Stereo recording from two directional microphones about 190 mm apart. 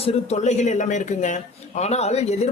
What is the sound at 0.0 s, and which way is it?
A man's voice, 35° left (ahead or behind).